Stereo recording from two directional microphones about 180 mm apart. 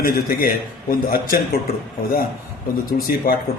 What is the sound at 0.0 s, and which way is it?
A man's voice, 55° left (ahead or behind).